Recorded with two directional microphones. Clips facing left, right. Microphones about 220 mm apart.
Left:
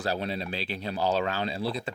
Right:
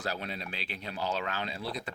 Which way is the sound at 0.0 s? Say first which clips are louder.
Left 6 dB; 30° left (ahead or behind).